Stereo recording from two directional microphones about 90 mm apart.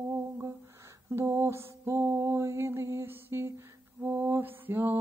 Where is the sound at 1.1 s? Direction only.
30° right (ahead or behind).